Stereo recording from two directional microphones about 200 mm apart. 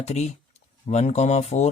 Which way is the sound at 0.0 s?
35° left (ahead or behind).